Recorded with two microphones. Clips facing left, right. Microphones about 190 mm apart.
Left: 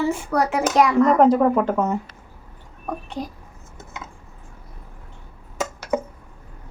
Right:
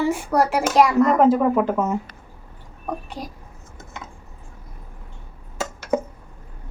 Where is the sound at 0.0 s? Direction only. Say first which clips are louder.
Right 1 dB; 10° right (ahead or behind).